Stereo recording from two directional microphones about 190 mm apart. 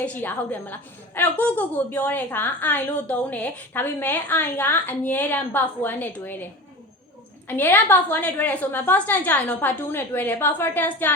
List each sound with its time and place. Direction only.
0.0 s a woman's voice: 10° left (ahead or behind)
7.4 s a woman's voice: 10° left (ahead or behind)